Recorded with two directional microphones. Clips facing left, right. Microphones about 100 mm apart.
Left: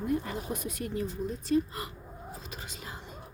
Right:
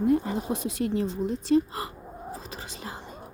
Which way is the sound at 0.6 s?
90° right.